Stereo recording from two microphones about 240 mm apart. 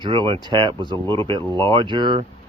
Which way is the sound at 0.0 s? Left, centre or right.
Centre.